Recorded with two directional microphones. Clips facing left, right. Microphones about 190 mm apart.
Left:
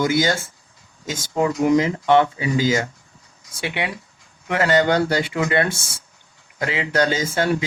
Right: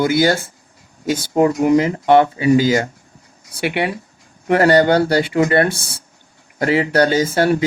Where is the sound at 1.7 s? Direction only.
40° right (ahead or behind).